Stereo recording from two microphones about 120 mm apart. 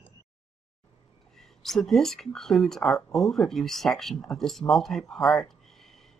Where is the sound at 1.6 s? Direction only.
Centre (ahead or behind).